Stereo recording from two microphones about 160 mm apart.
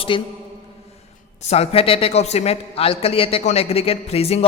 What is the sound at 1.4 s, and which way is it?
A man's voice, 40° left (ahead or behind).